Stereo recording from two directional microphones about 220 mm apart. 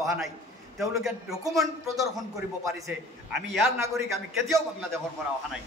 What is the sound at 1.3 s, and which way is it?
Speech, 15° right (ahead or behind).